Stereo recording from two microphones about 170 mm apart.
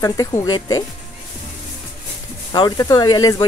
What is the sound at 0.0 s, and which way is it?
Speech, 20° left (ahead or behind).